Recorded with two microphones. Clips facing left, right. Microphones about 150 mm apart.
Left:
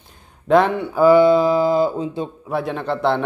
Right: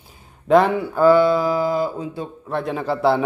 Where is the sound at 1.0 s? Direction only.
20° left (ahead or behind).